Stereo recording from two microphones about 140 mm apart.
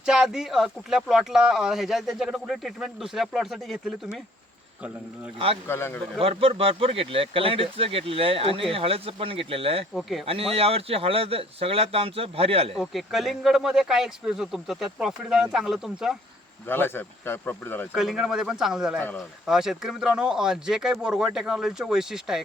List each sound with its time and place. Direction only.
0.0 s speech: 5° right (ahead or behind)
5.6 s speech: 15° left (ahead or behind)
6.1 s speech: 40° right (ahead or behind)
9.9 s speech: centre (ahead or behind)
10.2 s speech: 45° right (ahead or behind)
12.7 s speech: centre (ahead or behind)
16.6 s speech: 15° left (ahead or behind)
17.9 s speech: centre (ahead or behind)
18.9 s speech: 10° left (ahead or behind)
19.5 s speech: 5° right (ahead or behind)